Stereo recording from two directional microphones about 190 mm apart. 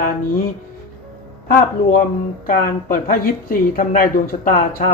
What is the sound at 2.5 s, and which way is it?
Speech, 45° left (ahead or behind).